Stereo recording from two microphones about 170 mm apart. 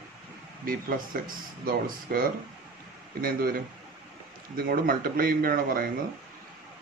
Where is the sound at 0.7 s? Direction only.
60° right (ahead or behind).